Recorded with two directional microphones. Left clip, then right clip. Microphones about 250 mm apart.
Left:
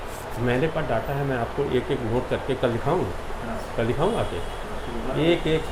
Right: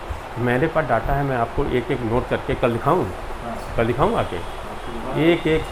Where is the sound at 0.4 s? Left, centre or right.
Right.